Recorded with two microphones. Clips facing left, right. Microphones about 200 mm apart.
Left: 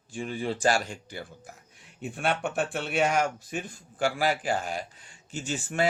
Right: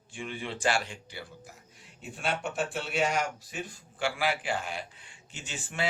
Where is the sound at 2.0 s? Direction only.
55° left (ahead or behind).